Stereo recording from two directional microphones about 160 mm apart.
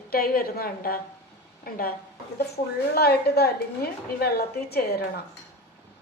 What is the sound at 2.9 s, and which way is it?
A woman's voice, 80° left.